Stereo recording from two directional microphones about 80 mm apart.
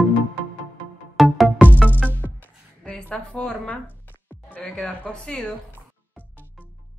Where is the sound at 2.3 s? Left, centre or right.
Left.